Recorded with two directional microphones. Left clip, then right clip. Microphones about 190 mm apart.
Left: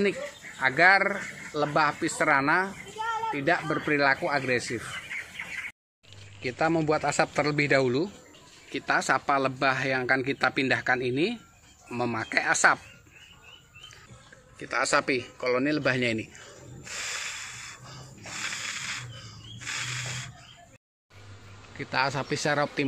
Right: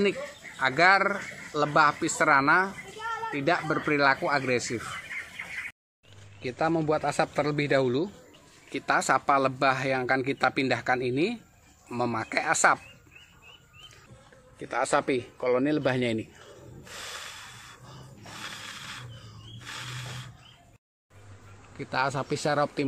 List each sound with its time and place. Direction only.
0.6 s a man's voice: 15° right (ahead or behind)
6.4 s a man's voice: 5° left (ahead or behind)
14.6 s a man's voice: 15° right (ahead or behind)
16.8 s a sound: 15° right (ahead or behind)
21.7 s a man's voice: 5° right (ahead or behind)